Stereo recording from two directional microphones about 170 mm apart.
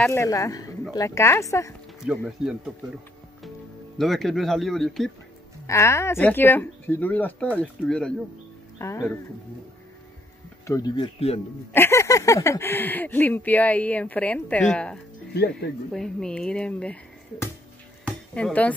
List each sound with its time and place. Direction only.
0.0 s speech: 15° left (ahead or behind)
2.0 s speech: centre (ahead or behind)
4.0 s speech: centre (ahead or behind)
5.7 s speech: 15° left (ahead or behind)
11.1 s speech: 35° left (ahead or behind)
11.7 s speech: 15° left (ahead or behind)
18.0 s music: 5° left (ahead or behind)